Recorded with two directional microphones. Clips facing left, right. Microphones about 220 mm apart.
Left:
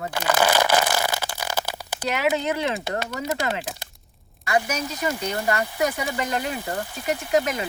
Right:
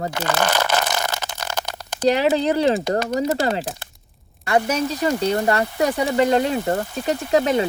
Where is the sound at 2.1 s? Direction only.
35° right (ahead or behind).